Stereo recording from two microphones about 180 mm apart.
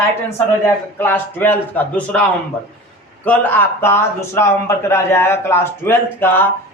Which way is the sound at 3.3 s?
10° left (ahead or behind).